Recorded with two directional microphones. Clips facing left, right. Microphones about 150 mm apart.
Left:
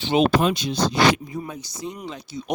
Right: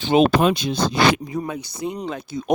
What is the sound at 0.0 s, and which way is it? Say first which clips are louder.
Speech: right 3 dB; 50° right (ahead or behind).